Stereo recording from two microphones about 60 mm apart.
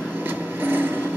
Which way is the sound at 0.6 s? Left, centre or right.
Right.